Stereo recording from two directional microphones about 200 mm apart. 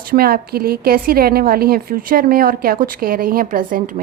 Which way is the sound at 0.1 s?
50° right (ahead or behind).